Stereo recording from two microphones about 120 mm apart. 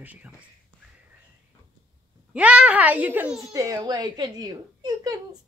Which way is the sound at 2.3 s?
10° right (ahead or behind).